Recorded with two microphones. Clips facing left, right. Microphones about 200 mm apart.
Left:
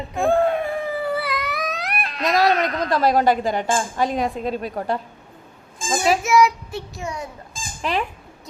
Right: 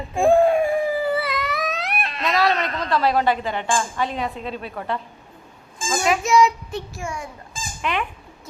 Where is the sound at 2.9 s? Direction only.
45° left (ahead or behind).